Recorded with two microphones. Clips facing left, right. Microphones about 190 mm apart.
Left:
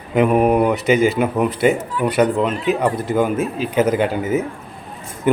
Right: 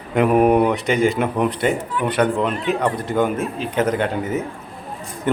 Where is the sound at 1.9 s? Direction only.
40° left (ahead or behind).